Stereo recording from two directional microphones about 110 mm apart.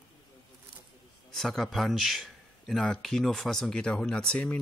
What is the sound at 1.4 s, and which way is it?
Speech, 5° left (ahead or behind).